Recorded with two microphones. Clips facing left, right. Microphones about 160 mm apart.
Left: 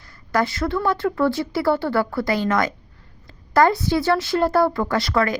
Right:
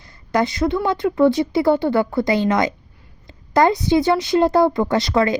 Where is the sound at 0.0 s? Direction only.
20° right (ahead or behind).